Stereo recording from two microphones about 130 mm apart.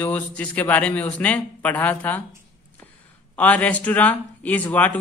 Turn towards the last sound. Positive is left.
turn(degrees=10)  # may be behind; listen again after turning